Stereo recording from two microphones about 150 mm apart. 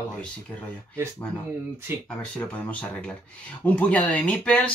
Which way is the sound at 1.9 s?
15° right (ahead or behind).